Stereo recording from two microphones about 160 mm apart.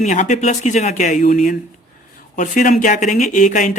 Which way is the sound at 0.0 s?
50° left (ahead or behind).